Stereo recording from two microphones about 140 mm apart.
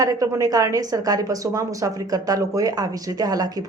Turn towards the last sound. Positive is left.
turn(degrees=-25)  # may be behind; listen again after turning